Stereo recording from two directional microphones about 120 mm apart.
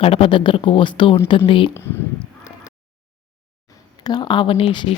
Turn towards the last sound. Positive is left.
turn(degrees=45)  # may be behind; listen again after turning